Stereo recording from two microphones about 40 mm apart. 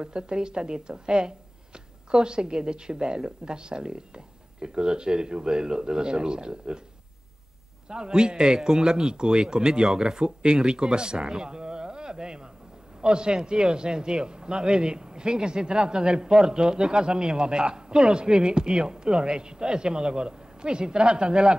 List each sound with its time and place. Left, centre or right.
0.0 s a man's voice: right
7.9 s a man's voice: centre